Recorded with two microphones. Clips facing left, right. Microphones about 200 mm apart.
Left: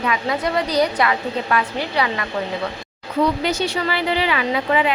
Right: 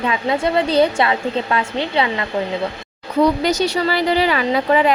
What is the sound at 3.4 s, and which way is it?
A woman's voice, 40° right (ahead or behind).